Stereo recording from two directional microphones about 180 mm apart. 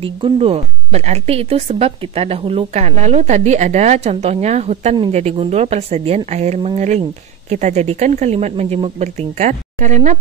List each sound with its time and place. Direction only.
0.0 s speech: 30° right (ahead or behind)